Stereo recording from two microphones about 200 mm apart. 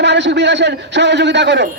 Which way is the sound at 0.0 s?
60° right (ahead or behind).